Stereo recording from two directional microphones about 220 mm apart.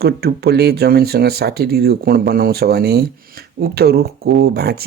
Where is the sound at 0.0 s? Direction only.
45° right (ahead or behind).